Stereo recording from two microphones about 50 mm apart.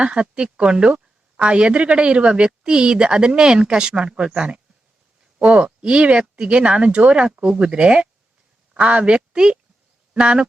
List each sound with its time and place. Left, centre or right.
0.0 s a woman's voice: right